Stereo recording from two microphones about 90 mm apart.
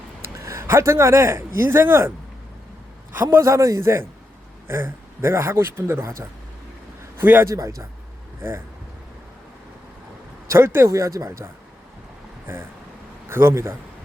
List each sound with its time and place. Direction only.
0.3 s a man's voice: 30° right (ahead or behind)
7.4 s speech: 35° right (ahead or behind)
10.5 s speech: 25° right (ahead or behind)
13.2 s a man's voice: 25° right (ahead or behind)